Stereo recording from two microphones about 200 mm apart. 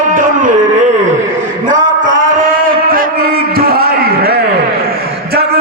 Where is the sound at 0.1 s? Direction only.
40° right (ahead or behind).